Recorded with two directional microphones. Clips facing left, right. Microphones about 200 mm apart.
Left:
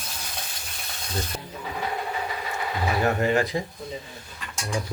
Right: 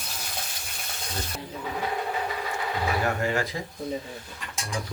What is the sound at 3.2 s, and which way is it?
Speech, 20° left (ahead or behind).